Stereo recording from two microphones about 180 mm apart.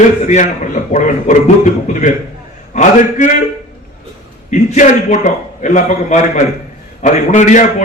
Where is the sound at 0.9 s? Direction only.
40° left (ahead or behind).